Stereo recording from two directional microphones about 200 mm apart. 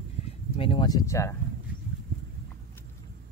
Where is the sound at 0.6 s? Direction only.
25° left (ahead or behind).